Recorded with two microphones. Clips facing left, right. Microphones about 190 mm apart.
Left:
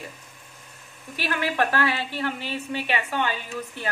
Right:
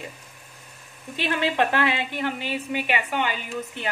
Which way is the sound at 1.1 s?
20° right (ahead or behind).